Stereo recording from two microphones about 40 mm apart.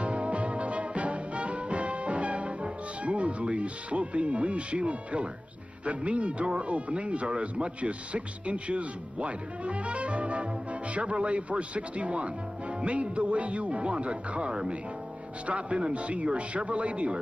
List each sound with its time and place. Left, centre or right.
0.0 s music: right
5.9 s speech: right